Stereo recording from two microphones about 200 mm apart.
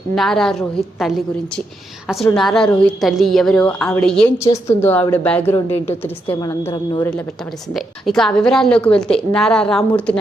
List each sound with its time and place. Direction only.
0.2 s a woman's voice: centre (ahead or behind)
6.2 s a woman's voice: 20° left (ahead or behind)
7.7 s a woman's voice: centre (ahead or behind)